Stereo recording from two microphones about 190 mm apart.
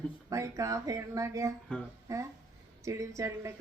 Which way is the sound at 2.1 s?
15° right (ahead or behind).